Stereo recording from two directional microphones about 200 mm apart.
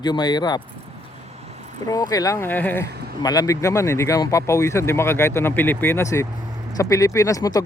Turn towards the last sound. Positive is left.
turn(degrees=20)  # may be behind; listen again after turning